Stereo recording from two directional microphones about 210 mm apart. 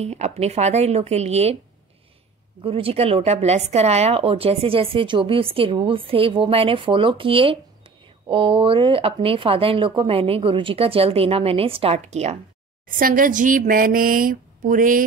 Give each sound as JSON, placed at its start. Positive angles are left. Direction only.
{"t": 0.0, "sound": "speech", "side_deg": -30}
{"t": 2.6, "sound": "speech", "side_deg": -25}